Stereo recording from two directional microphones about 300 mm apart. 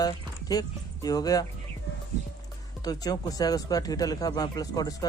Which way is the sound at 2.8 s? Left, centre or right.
Centre.